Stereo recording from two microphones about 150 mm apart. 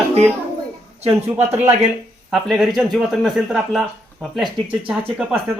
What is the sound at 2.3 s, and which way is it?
Speech, centre (ahead or behind).